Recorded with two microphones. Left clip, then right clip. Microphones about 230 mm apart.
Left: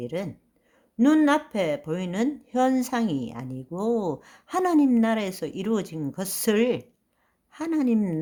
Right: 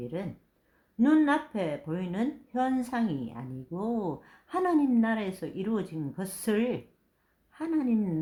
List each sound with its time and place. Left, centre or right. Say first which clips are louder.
0.9 s speech: left 4 dB; left